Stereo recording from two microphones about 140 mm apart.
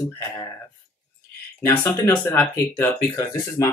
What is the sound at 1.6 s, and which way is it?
Speech, 20° left (ahead or behind).